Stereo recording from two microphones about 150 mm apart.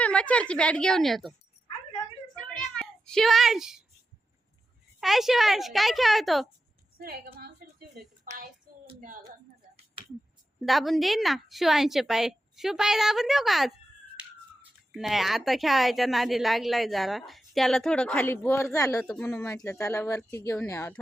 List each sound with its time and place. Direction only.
0.0 s a woman's voice: 10° left (ahead or behind)
2.5 s meow: 5° left (ahead or behind)
4.9 s speech: centre (ahead or behind)
7.0 s a sound: 90° right
10.6 s speech: centre (ahead or behind); by 19.0 s 20° left (ahead or behind)
19.0 s a woman's voice: 5° left (ahead or behind)
19.3 s a woman's voice: 20° left (ahead or behind)